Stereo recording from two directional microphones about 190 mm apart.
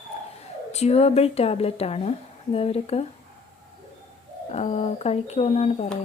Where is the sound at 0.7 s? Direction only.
35° left (ahead or behind).